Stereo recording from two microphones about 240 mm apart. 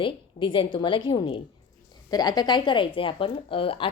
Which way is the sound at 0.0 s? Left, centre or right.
Left.